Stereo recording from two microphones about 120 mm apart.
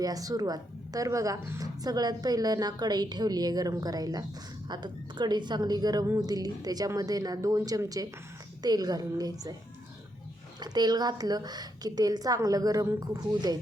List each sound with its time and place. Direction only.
0.0 s a woman's voice: 30° right (ahead or behind)
10.6 s a woman's voice: 35° right (ahead or behind)